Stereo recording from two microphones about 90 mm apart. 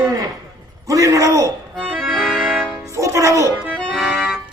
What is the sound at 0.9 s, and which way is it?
Speech, 35° right (ahead or behind).